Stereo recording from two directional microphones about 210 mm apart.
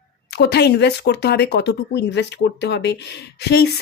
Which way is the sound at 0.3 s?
50° left (ahead or behind).